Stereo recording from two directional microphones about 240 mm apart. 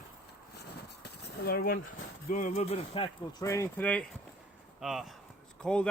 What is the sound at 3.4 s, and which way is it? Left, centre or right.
Speech, centre.